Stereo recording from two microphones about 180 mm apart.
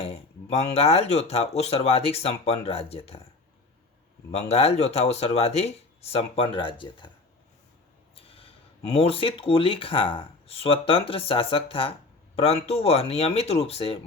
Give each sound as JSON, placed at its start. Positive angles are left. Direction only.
{"t": 0.7, "sound": "speech", "side_deg": 35}
{"t": 4.3, "sound": "speech", "side_deg": 35}
{"t": 8.1, "sound": "a sound", "side_deg": 30}
{"t": 8.9, "sound": "speech", "side_deg": 30}